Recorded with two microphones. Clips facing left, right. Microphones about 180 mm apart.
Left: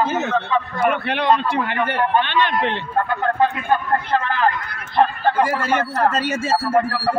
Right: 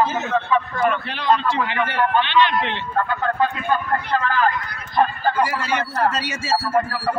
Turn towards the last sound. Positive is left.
turn(degrees=55)  # may be behind; listen again after turning